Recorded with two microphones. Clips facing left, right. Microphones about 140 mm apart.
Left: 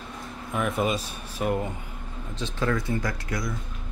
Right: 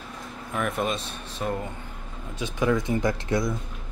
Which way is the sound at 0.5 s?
Centre (ahead or behind).